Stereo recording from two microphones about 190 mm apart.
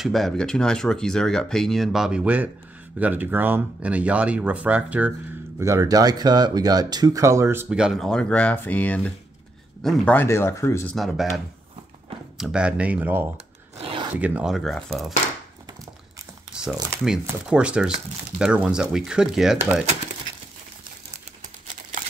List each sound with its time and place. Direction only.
0.0 s speech: centre (ahead or behind); by 7.6 s 15° right (ahead or behind)
7.7 s speech: 5° right (ahead or behind); by 11.0 s 15° left (ahead or behind)
11.0 s speech: centre (ahead or behind)
13.7 s zipper: 25° right (ahead or behind)
14.1 s speech: 5° right (ahead or behind)
17.0 s speech: 5° right (ahead or behind)